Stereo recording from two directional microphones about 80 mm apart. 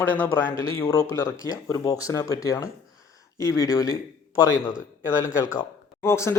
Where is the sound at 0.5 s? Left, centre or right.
Left.